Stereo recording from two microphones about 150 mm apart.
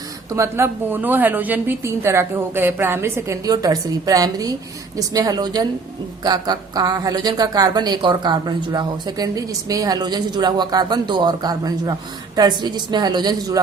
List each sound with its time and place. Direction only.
0.3 s a woman's voice: 20° right (ahead or behind)